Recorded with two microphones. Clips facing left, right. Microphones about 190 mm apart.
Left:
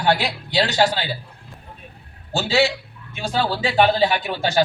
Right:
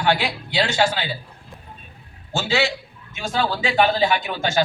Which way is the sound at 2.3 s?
35° left (ahead or behind).